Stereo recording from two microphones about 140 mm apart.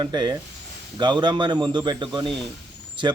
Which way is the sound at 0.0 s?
30° right (ahead or behind).